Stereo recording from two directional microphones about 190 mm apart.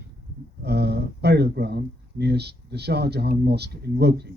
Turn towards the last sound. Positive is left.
turn(degrees=-60)  # may be behind; listen again after turning